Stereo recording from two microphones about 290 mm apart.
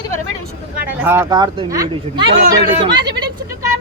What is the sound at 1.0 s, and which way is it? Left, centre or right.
Speech, centre.